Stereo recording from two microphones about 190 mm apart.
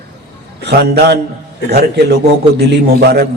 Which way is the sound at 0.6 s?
60° right (ahead or behind).